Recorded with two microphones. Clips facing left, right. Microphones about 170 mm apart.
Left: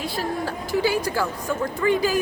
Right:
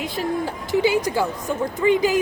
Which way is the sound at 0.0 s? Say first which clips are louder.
Right 2 dB; 20° right (ahead or behind).